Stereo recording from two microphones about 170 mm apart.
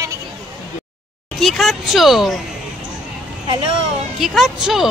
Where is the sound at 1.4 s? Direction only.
Centre (ahead or behind).